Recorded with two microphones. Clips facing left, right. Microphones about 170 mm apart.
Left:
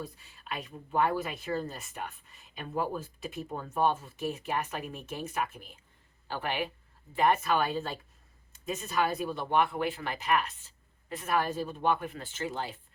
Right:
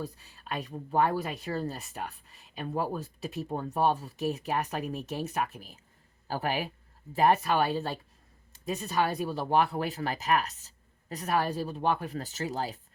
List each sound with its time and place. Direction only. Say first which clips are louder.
0.0 s speech: right 3 dB; 35° right (ahead or behind)